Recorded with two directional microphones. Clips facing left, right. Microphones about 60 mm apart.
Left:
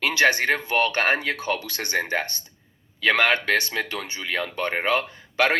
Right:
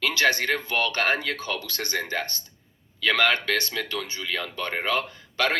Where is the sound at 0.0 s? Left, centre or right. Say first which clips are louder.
Left 3 dB; left.